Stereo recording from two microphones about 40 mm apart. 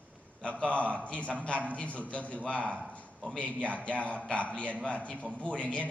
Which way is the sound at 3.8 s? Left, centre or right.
Left.